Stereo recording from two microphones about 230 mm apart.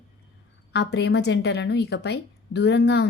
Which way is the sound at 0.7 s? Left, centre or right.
Left.